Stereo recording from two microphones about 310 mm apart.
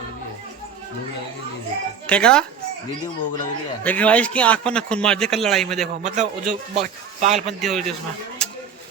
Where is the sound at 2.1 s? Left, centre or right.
Centre.